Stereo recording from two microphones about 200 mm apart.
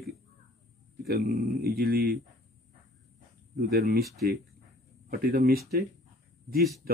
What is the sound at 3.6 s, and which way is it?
Speech, 50° right (ahead or behind).